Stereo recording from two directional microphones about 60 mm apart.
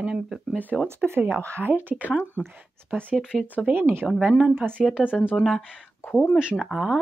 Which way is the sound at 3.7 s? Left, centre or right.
Right.